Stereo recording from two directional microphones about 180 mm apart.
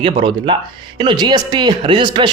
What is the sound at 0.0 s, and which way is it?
A man's voice, 30° right (ahead or behind).